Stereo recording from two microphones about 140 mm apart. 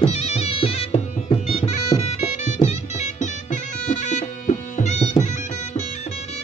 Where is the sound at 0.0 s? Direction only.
45° left (ahead or behind).